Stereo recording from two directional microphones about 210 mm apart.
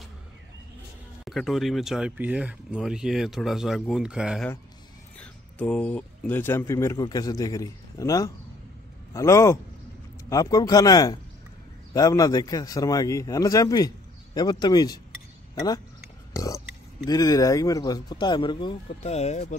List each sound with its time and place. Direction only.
1.2 s speech: centre (ahead or behind); by 15.0 s 20° left (ahead or behind)
16.3 s speech: 15° left (ahead or behind); by 19.5 s 30° left (ahead or behind)